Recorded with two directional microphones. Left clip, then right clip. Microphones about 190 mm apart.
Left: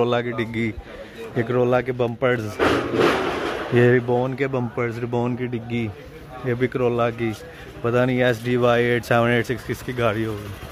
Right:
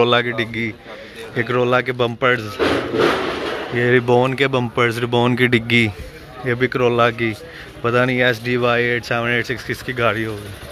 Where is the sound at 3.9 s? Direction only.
Centre (ahead or behind); by 9.6 s 25° left (ahead or behind).